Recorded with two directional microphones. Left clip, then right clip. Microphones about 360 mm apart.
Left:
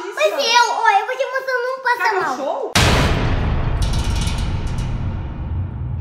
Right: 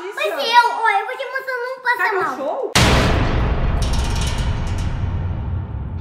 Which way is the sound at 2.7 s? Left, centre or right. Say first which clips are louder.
Right 1 dB; centre.